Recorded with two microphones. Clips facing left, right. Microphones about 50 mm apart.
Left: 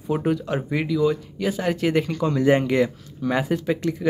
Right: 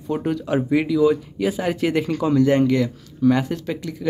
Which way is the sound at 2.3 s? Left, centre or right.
Centre.